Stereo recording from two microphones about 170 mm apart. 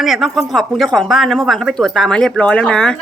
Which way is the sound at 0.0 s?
Centre (ahead or behind).